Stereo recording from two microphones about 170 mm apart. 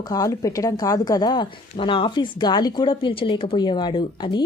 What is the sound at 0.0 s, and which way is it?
Speech, 20° left (ahead or behind).